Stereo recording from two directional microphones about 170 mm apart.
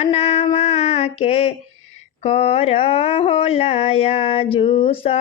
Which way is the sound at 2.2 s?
35° left (ahead or behind).